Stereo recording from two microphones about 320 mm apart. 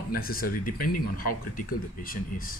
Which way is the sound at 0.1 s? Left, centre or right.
Left.